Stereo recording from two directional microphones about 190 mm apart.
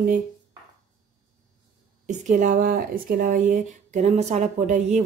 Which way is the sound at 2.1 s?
40° right (ahead or behind).